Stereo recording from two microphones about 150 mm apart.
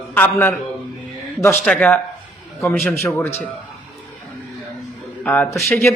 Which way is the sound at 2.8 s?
20° left (ahead or behind).